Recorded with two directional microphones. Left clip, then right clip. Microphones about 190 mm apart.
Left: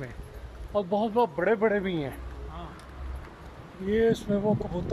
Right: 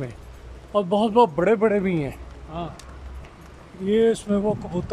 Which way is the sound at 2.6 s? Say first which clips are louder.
Right 12 dB; 55° right (ahead or behind).